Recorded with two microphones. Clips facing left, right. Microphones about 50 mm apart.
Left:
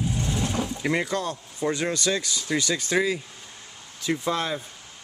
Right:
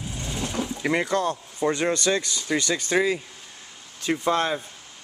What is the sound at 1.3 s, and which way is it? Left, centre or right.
A man's voice, right.